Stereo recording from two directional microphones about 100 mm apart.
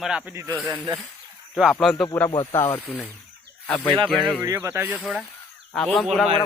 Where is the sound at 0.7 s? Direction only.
40° right (ahead or behind).